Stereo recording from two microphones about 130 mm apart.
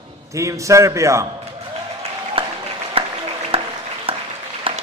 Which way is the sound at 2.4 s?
45° right (ahead or behind).